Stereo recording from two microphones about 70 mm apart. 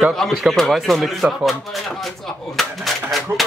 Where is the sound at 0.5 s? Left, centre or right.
Centre.